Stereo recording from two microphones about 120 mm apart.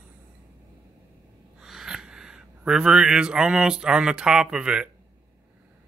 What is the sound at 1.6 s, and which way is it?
Speech, 5° right (ahead or behind).